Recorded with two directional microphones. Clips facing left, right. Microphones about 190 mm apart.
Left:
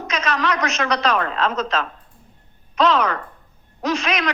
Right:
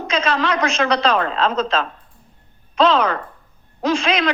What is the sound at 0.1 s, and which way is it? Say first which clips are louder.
A woman's voice: right 3 dB; 30° right (ahead or behind).